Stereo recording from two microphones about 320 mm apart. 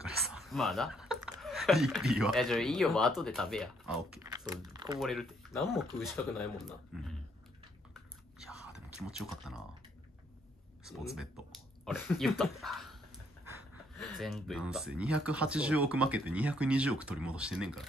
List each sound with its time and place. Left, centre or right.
0.0 s speech: centre
5.0 s speech: centre
8.9 s speech: centre
11.1 s speech: centre